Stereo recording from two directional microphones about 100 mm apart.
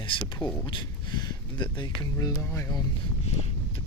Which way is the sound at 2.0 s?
35° left (ahead or behind).